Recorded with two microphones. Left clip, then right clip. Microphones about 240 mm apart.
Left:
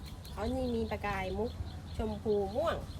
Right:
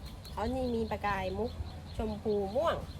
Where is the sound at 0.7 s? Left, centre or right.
Centre.